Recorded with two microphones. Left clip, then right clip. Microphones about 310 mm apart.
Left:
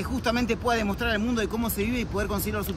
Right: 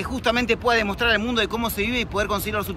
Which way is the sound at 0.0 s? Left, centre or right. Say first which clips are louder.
Right 5 dB; centre.